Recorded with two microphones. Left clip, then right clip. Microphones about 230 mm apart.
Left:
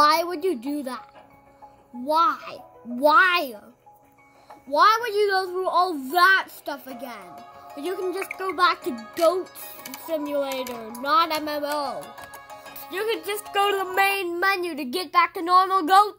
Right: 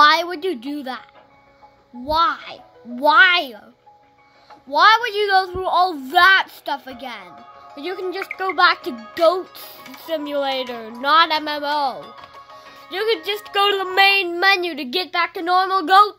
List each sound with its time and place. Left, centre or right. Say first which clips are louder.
0.0 s a sound: right 5 dB; centre
2.0 s a child's voice: right 2 dB; centre
4.6 s a woman's voice: right 5 dB; centre
8.4 s a woman's voice: right 6 dB; centre